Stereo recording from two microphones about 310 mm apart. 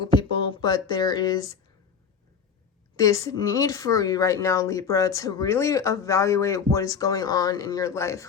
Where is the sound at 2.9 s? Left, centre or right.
Centre.